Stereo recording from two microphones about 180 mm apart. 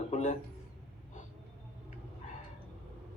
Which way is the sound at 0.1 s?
40° left (ahead or behind).